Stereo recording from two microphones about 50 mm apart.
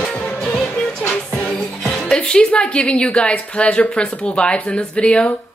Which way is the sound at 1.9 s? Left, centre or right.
Centre.